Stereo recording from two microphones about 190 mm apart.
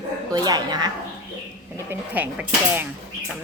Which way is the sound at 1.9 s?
10° right (ahead or behind).